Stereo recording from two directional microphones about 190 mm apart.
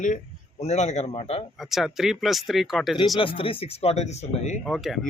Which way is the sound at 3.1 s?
25° left (ahead or behind).